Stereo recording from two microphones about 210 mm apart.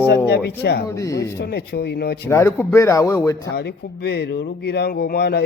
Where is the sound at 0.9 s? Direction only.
15° left (ahead or behind).